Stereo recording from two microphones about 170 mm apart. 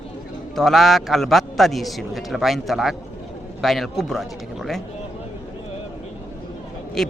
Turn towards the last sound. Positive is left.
turn(degrees=0)  # may be behind; listen again after turning